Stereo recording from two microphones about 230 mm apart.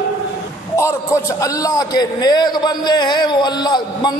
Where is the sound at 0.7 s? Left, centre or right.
Centre.